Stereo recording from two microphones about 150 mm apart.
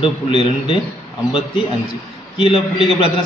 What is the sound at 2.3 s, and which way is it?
Speech, 35° left (ahead or behind).